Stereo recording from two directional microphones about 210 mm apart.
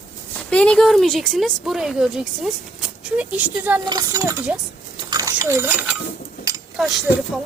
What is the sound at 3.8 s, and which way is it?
A woman's voice, 20° right (ahead or behind).